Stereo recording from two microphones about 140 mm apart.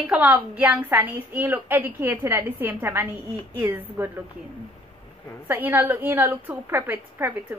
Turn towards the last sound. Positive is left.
turn(degrees=-15)  # may be behind; listen again after turning